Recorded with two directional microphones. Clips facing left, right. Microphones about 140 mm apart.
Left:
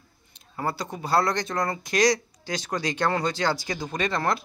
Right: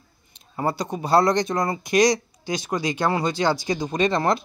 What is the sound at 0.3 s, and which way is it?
Speech, 20° right (ahead or behind).